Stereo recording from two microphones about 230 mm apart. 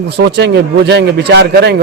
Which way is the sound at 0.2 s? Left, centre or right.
Right.